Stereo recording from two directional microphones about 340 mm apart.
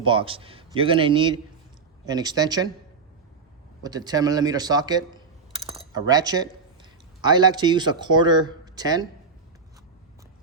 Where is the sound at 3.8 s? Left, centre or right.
Centre.